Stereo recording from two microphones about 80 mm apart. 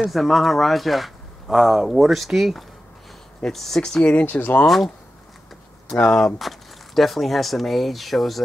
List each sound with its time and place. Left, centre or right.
0.0 s speech: centre
4.1 s speech: left
4.6 s speech: centre
5.9 s speech: centre
6.2 s speech: centre